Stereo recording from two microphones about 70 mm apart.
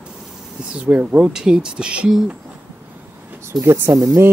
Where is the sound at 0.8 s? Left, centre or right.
Right.